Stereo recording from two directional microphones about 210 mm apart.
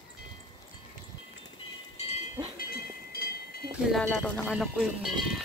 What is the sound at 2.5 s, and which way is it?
Train, 45° left (ahead or behind).